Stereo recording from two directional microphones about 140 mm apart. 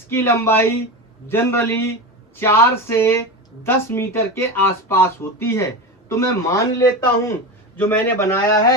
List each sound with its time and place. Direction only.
0.1 s a man's voice: 15° left (ahead or behind)